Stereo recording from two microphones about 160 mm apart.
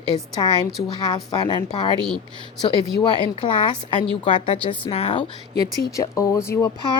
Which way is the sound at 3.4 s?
30° left (ahead or behind).